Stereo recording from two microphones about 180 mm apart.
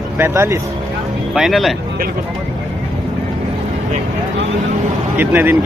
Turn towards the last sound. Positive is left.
turn(degrees=-10)  # may be behind; listen again after turning